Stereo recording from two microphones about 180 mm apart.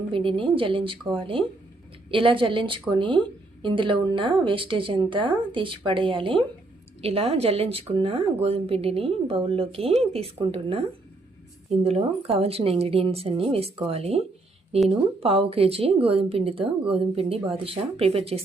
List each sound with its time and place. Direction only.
0.1 s a woman's voice: 30° right (ahead or behind)